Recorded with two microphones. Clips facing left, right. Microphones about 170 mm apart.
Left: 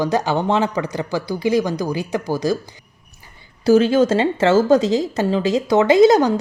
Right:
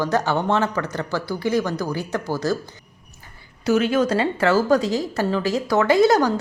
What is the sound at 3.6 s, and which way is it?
Speech, 30° left (ahead or behind).